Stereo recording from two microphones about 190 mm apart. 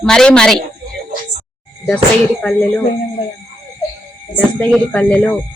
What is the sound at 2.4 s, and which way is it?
Speech, 5° left (ahead or behind).